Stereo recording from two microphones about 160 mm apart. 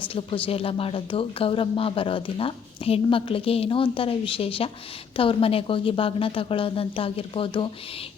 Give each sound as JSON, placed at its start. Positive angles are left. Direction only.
{"t": 0.1, "sound": "speech", "side_deg": 35}